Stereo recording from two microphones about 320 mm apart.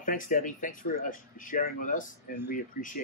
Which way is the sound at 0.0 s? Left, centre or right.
Left.